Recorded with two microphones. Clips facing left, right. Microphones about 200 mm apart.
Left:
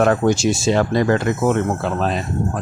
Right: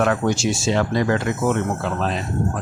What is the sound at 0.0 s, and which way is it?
Speech, 40° left (ahead or behind).